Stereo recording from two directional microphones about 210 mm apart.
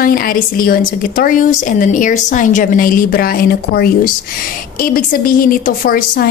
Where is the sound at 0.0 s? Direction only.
40° left (ahead or behind).